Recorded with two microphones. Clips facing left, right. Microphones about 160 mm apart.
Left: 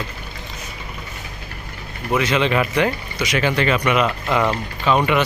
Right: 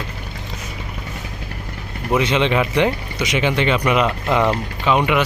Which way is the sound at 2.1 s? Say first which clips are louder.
Right 1 dB; 25° right (ahead or behind).